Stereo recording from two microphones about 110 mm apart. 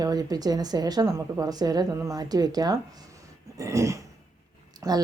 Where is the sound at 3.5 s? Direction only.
30° right (ahead or behind).